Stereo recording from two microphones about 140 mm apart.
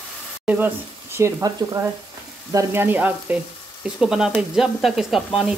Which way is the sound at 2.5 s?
20° right (ahead or behind).